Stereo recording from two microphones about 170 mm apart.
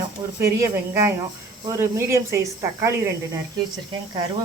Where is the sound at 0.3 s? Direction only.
15° right (ahead or behind).